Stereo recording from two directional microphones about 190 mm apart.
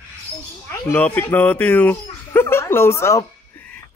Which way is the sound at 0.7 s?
10° left (ahead or behind).